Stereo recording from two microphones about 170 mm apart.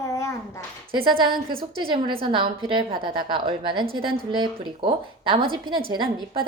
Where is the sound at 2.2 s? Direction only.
25° right (ahead or behind).